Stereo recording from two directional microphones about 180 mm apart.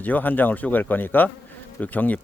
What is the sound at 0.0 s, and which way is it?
Speech, 10° left (ahead or behind).